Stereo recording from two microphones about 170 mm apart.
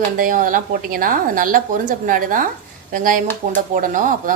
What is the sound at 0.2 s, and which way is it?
A woman's voice, 50° right (ahead or behind).